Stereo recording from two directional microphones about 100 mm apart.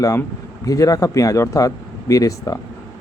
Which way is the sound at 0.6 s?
35° left (ahead or behind).